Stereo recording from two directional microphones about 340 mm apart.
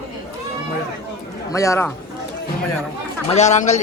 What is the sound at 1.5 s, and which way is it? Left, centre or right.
Speech, centre.